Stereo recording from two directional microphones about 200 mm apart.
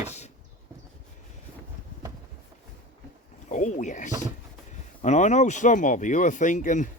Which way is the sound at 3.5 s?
35° left (ahead or behind).